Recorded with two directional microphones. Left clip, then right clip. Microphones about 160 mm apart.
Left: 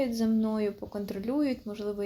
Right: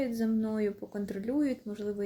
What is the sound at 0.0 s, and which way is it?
Speech, 20° right (ahead or behind).